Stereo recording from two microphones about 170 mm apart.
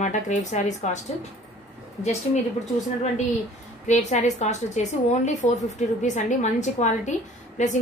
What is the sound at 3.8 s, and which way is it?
A woman's voice, 45° left (ahead or behind).